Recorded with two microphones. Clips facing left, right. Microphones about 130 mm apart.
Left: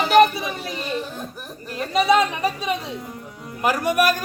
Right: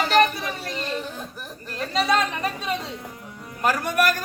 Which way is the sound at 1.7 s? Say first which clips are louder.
Left 4 dB; 10° left (ahead or behind).